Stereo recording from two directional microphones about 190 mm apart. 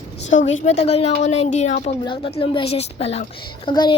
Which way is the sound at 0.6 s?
35° left (ahead or behind).